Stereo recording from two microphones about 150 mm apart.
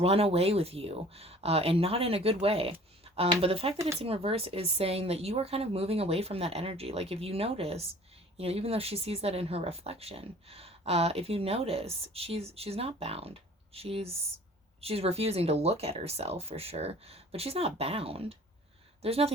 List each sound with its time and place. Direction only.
0.0 s speech: 40° right (ahead or behind)